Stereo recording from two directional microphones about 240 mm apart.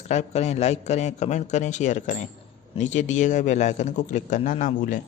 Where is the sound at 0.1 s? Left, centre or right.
Left.